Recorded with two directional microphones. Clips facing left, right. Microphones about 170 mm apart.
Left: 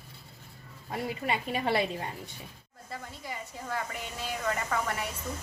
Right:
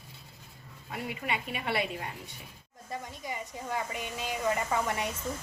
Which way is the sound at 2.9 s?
15° right (ahead or behind).